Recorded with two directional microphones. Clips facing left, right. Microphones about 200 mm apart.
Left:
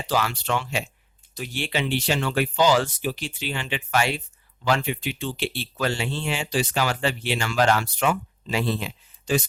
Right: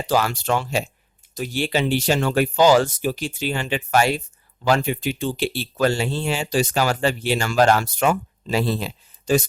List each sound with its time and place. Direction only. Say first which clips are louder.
0.0 s speech: right 4 dB; 45° right (ahead or behind)